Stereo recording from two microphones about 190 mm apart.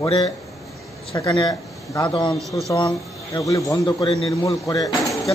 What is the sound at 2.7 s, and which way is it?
A man's voice, 20° left (ahead or behind).